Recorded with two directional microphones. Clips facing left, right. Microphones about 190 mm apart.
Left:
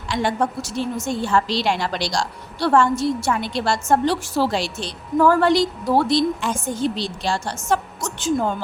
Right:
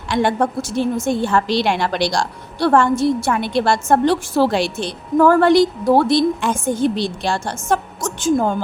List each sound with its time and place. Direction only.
0.1 s a woman's voice: 55° right (ahead or behind)